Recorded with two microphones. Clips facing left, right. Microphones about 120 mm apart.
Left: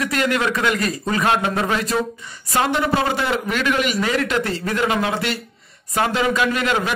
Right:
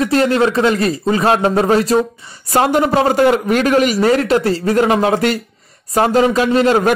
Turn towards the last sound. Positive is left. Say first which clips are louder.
# right 8 dB
turn(degrees=-40)  # may be behind; listen again after turning